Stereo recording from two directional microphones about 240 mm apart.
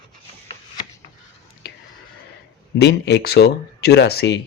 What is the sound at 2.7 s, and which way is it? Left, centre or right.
Speech, left.